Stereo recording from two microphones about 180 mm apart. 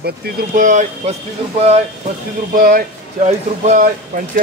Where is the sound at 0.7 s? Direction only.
40° right (ahead or behind).